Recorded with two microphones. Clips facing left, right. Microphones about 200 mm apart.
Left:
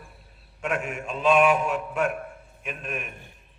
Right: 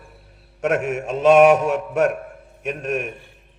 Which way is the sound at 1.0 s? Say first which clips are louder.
Right 8 dB; 80° right.